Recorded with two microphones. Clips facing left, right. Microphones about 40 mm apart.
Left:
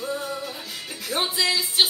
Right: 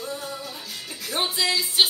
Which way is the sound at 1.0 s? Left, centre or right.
Centre.